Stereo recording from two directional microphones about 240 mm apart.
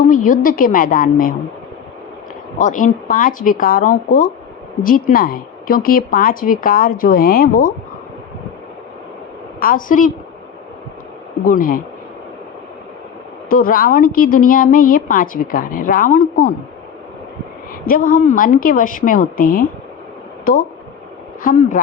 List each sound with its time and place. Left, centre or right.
0.1 s a woman's voice: left
2.6 s a woman's voice: left
9.6 s a woman's voice: left
11.4 s a woman's voice: left
13.5 s a woman's voice: left
17.8 s a woman's voice: left